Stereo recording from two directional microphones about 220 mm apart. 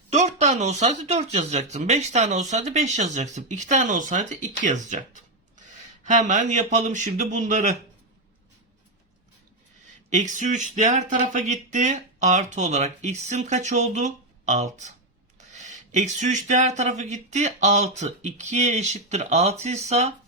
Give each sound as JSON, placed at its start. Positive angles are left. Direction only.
{"t": 0.1, "sound": "speech", "side_deg": -30}
{"t": 10.1, "sound": "speech", "side_deg": -35}